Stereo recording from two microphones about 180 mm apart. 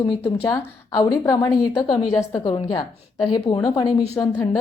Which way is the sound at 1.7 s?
30° left (ahead or behind).